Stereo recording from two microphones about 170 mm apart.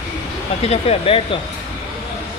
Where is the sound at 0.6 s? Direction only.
35° left (ahead or behind).